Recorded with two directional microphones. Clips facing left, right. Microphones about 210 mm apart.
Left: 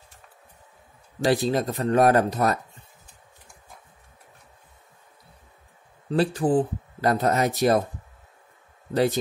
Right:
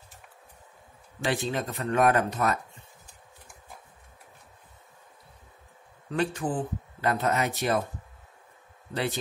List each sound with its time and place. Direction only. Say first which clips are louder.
1.2 s speech: left 7 dB; 40° left (ahead or behind)
6.0 s speech: left 6 dB; 35° left (ahead or behind)
8.9 s speech: left 8 dB; 40° left (ahead or behind)